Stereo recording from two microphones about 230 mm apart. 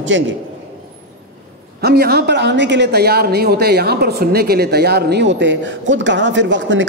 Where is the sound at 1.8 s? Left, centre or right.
Right.